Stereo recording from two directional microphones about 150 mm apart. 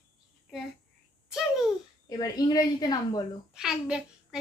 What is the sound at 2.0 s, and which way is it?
A woman's voice, 25° left (ahead or behind).